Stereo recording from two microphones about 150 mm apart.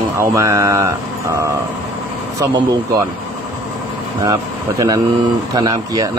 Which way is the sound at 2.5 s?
25° right (ahead or behind).